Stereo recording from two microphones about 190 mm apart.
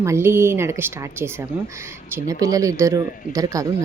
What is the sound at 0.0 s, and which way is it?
Speech, 15° right (ahead or behind).